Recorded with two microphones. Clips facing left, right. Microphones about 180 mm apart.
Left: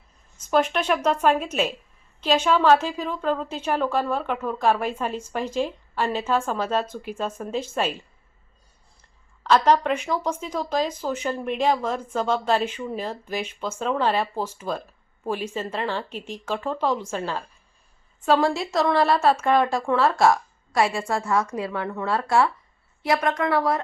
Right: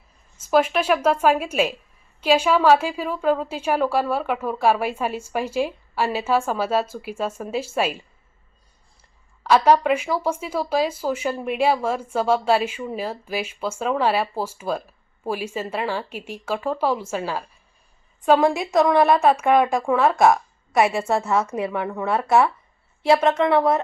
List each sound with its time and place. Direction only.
0.3 s a woman's voice: 5° right (ahead or behind)
9.4 s a woman's voice: 10° right (ahead or behind)